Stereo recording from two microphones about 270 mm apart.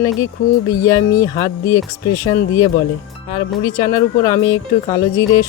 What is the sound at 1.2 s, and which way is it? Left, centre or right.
Speech, centre.